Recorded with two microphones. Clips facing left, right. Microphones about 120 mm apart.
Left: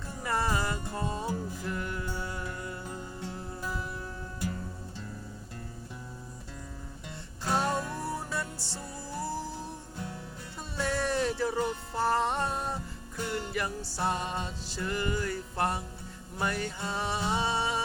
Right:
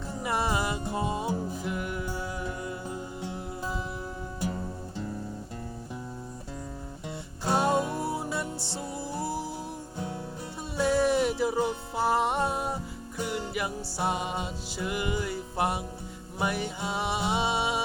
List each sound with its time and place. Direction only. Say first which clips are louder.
0.1 s music: right 2 dB; 15° right (ahead or behind)
7.4 s music: right 4 dB; 15° right (ahead or behind)
10.8 s music: right 6 dB; 15° right (ahead or behind)